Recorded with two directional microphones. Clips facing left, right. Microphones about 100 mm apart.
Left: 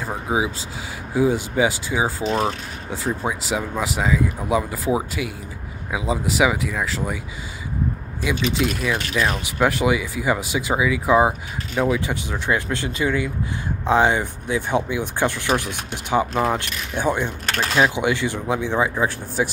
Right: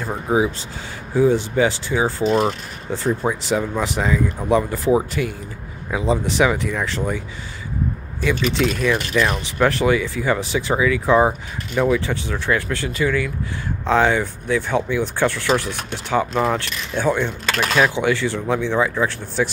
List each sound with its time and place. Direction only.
0.0 s speech: 10° left (ahead or behind)
8.8 s speech: 10° left (ahead or behind)